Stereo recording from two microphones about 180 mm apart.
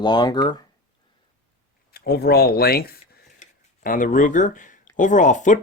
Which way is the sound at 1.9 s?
60° left (ahead or behind).